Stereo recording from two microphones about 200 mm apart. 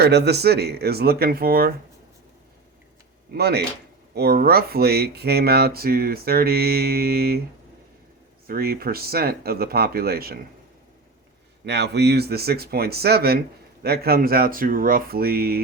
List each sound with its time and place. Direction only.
0.0 s speech: 55° right (ahead or behind)
3.3 s speech: 55° right (ahead or behind)
8.4 s speech: 50° right (ahead or behind)
11.6 s speech: 60° right (ahead or behind)